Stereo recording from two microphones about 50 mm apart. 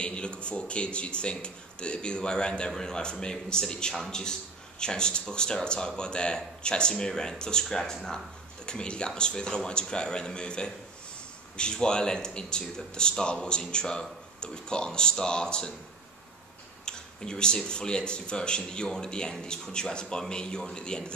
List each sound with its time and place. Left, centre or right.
0.0 s speech: left
16.8 s a sound: centre
17.6 s speech: centre